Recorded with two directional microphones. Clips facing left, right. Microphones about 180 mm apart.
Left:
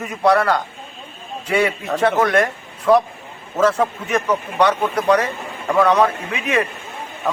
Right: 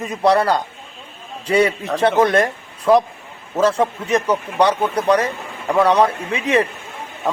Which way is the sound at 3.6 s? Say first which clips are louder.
Even; 30° right (ahead or behind).